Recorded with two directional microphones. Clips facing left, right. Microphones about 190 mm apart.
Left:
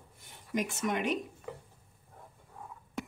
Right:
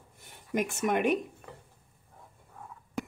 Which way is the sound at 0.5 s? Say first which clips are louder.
Right 4 dB; 55° right (ahead or behind).